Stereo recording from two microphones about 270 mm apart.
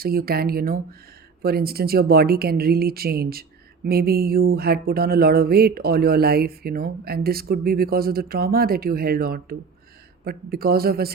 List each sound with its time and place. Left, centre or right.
0.0 s mantra: right